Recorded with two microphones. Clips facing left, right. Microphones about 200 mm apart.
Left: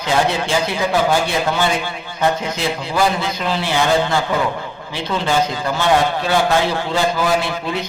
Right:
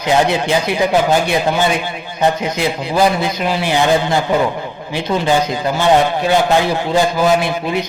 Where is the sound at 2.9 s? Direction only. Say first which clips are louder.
Right 4 dB; 15° right (ahead or behind).